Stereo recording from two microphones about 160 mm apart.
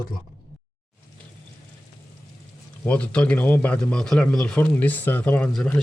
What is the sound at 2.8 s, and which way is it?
Speech, 10° left (ahead or behind).